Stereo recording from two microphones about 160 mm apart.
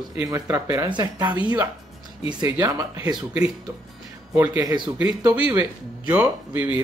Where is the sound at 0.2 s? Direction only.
20° right (ahead or behind).